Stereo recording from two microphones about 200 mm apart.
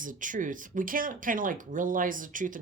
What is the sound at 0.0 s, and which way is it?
Speech, 40° right (ahead or behind).